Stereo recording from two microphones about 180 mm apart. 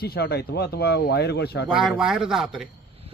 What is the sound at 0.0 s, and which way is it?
Speech, 60° left (ahead or behind).